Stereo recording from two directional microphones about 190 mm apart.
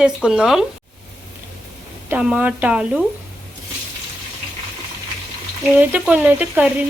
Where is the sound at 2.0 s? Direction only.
5° right (ahead or behind).